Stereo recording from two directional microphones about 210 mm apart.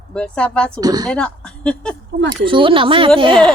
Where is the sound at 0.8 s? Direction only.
20° right (ahead or behind).